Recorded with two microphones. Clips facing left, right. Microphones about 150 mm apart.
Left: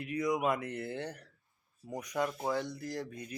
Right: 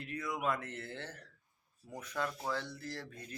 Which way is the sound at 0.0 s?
15° left (ahead or behind).